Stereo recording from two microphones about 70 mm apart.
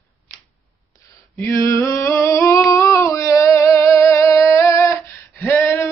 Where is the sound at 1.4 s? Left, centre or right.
Left.